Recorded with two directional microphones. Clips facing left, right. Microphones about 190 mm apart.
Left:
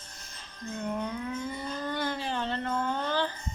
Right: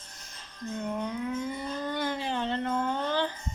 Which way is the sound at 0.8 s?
15° right (ahead or behind).